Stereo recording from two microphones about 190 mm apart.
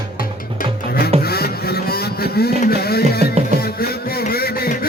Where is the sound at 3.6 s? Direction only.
55° left (ahead or behind).